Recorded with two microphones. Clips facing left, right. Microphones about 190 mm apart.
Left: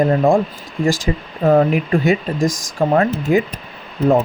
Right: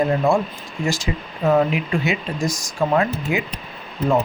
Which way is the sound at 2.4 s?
90° left.